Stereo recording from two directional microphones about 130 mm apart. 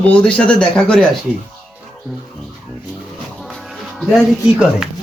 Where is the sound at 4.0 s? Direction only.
Centre (ahead or behind).